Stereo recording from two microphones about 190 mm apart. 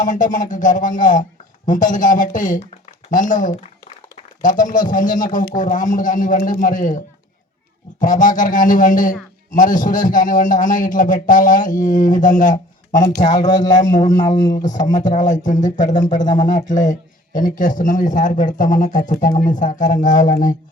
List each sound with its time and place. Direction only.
0.0 s a man's voice: 45° left (ahead or behind)
4.4 s a man's voice: 45° left (ahead or behind)
8.0 s a man's voice: 45° left (ahead or behind)
13.2 s speech: 20° left (ahead or behind)
15.1 s speech: 40° left (ahead or behind)
16.2 s speech: 20° left (ahead or behind)
17.3 s a man's voice: 45° left (ahead or behind)